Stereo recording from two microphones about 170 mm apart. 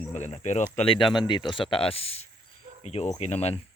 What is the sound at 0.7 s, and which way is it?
Speech, 30° left (ahead or behind).